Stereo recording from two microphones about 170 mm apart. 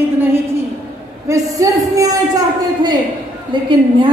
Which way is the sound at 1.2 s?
20° right (ahead or behind).